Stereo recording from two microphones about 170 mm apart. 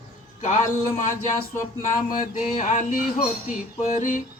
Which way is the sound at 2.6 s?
45° left (ahead or behind).